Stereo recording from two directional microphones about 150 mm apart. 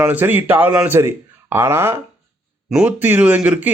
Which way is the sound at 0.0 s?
10° right (ahead or behind).